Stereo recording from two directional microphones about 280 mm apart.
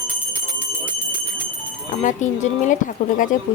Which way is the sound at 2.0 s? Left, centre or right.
Left.